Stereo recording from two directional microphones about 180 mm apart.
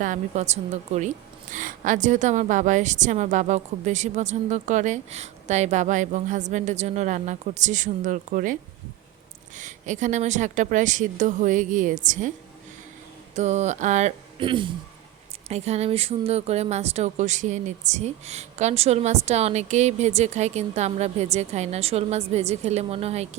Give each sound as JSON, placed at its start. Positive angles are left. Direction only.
{"t": 0.0, "sound": "a woman's voice", "side_deg": -40}
{"t": 9.6, "sound": "a woman's voice", "side_deg": -45}
{"t": 13.3, "sound": "a woman's voice", "side_deg": -40}
{"t": 14.3, "sound": "a man's voice", "side_deg": -25}